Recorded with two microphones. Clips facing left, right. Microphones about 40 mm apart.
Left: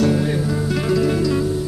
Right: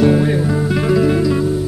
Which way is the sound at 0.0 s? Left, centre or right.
Centre.